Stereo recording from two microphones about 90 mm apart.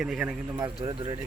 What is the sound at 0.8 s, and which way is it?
Speech, 80° right.